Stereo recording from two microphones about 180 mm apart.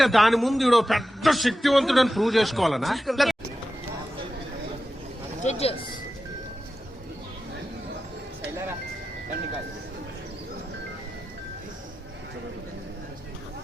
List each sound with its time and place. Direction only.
0.0 s a man's voice: centre (ahead or behind)
5.4 s speech: 35° left (ahead or behind)